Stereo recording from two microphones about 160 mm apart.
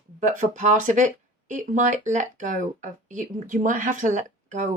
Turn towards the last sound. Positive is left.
turn(degrees=-50)  # may be behind; listen again after turning